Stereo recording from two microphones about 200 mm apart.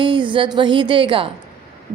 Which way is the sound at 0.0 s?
25° right (ahead or behind).